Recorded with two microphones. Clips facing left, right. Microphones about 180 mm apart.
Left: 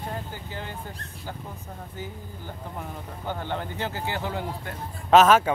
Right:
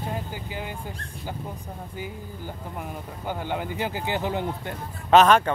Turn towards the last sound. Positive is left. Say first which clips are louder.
# even
turn(degrees=5)  # may be behind; listen again after turning